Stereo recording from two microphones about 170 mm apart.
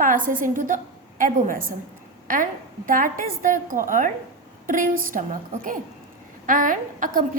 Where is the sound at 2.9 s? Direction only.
55° right (ahead or behind).